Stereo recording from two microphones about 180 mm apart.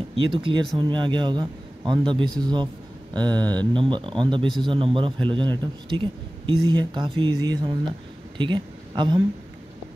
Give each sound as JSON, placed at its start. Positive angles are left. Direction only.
{"t": 0.3, "sound": "a man's voice", "side_deg": -25}